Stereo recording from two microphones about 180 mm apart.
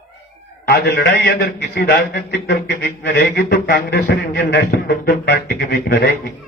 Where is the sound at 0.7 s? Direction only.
65° left (ahead or behind).